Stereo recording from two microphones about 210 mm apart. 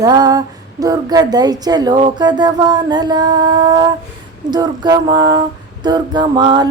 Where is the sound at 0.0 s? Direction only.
20° right (ahead or behind).